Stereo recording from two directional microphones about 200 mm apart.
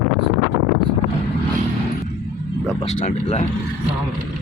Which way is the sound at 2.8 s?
35° left (ahead or behind).